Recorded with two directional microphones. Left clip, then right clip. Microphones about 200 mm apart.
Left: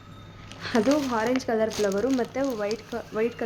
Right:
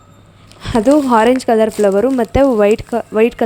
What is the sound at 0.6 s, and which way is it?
Speech, 35° right (ahead or behind).